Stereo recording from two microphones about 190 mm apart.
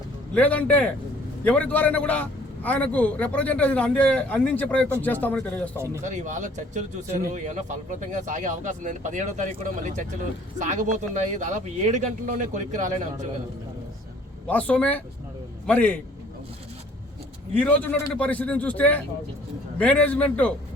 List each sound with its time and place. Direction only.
0.3 s a man's voice: 5° left (ahead or behind)
5.7 s speech: 15° right (ahead or behind)
6.0 s speech: 40° right (ahead or behind)
14.4 s a man's voice: 5° left (ahead or behind)
17.5 s a man's voice: 10° left (ahead or behind)